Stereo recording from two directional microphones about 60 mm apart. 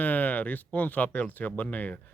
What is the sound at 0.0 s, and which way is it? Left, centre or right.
Speech, left.